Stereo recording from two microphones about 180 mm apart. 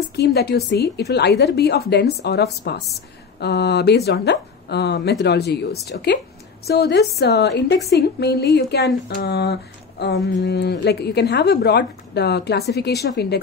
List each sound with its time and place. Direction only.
0.1 s speech: 65° left (ahead or behind)